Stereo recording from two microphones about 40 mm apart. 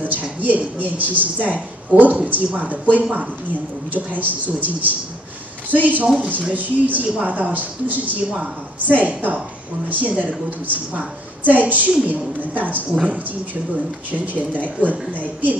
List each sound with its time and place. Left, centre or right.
0.0 s a woman's voice: right
3.0 s speech: right
3.9 s a woman's voice: right
14.1 s a woman's voice: right